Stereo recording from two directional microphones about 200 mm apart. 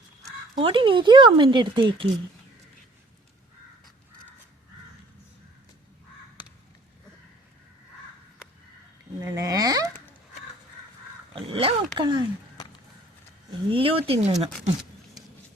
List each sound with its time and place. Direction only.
0.3 s speech: 25° right (ahead or behind)
9.2 s speech: 15° right (ahead or behind)
11.3 s speech: 25° right (ahead or behind)
13.7 s speech: 25° right (ahead or behind)